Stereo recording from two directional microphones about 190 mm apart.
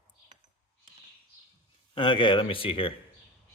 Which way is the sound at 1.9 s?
25° left (ahead or behind).